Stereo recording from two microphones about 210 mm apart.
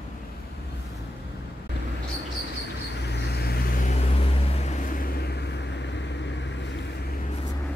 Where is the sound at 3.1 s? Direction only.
50° left (ahead or behind).